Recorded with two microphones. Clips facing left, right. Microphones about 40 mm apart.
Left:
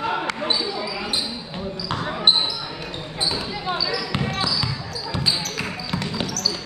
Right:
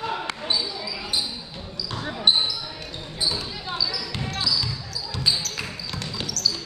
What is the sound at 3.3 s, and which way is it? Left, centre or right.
Basketball bounce, left.